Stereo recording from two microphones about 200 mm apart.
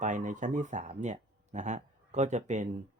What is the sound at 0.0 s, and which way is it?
Speech, 40° right (ahead or behind).